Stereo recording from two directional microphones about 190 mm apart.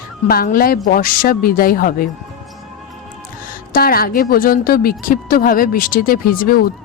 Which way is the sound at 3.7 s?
50° left (ahead or behind).